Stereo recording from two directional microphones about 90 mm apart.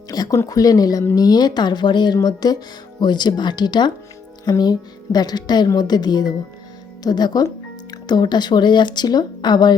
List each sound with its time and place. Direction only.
0.1 s a sound: 45° left (ahead or behind)
0.4 s speech: 45° left (ahead or behind)
2.1 s speech: 45° left (ahead or behind)